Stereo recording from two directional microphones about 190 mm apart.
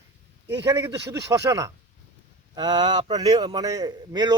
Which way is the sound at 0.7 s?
15° right (ahead or behind).